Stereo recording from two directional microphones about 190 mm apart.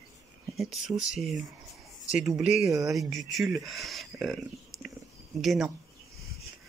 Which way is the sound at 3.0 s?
Centre (ahead or behind).